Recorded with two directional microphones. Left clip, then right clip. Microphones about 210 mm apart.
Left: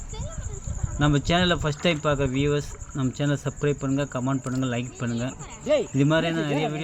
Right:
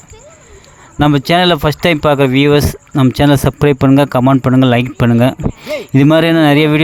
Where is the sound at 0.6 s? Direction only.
50° right (ahead or behind).